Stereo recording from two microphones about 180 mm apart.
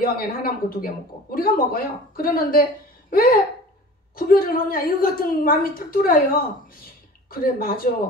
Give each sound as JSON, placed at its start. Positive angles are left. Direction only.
{"t": 0.0, "sound": "speech", "side_deg": 55}
{"t": 3.1, "sound": "a sound", "side_deg": 55}
{"t": 4.1, "sound": "a woman's voice", "side_deg": 55}